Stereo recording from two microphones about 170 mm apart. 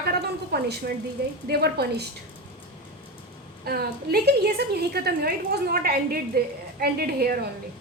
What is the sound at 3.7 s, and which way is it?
A woman's voice, 65° right (ahead or behind).